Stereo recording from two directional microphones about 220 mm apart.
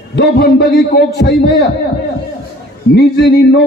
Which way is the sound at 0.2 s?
45° left (ahead or behind).